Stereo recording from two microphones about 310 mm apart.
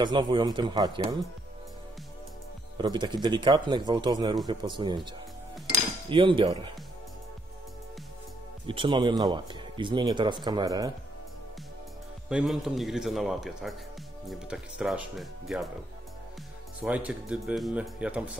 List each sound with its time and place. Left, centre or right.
0.0 s speech: centre
2.8 s speech: centre
6.0 s speech: centre
8.6 s speech: centre
12.3 s speech: centre
16.8 s speech: centre